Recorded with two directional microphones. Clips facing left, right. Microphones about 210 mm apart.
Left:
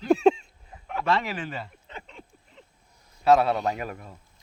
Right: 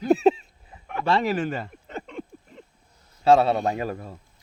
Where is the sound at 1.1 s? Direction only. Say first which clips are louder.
Right 5 dB; 35° right (ahead or behind).